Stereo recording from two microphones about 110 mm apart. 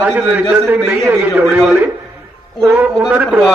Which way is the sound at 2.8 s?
10° right (ahead or behind).